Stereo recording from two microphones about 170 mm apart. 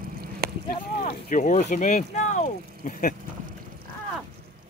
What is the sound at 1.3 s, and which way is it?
Speech, 50° left (ahead or behind).